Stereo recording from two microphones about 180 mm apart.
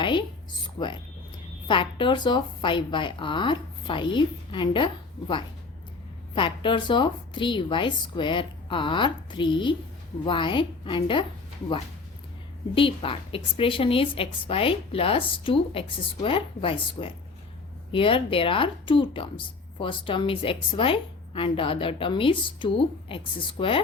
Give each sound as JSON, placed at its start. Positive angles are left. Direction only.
{"t": 0.0, "sound": "a sound", "side_deg": 25}
{"t": 1.6, "sound": "speech", "side_deg": 30}
{"t": 6.3, "sound": "speech", "side_deg": 30}
{"t": 12.7, "sound": "speech", "side_deg": 30}